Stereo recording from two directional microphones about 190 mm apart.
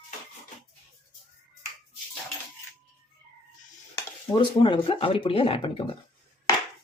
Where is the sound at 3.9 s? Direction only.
25° left (ahead or behind).